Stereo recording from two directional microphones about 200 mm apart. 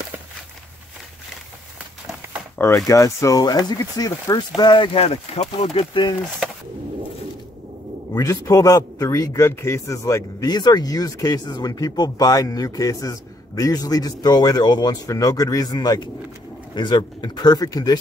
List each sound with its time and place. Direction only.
2.6 s speech: 15° left (ahead or behind)
8.1 s speech: 15° left (ahead or behind)